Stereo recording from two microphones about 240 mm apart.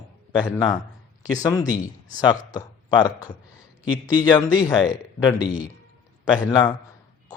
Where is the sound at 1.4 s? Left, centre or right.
Centre.